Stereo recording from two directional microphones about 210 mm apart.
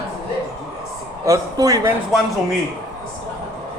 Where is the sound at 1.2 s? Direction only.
15° right (ahead or behind).